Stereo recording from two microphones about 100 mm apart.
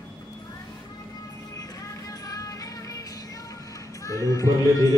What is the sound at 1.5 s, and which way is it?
Music, 35° left (ahead or behind).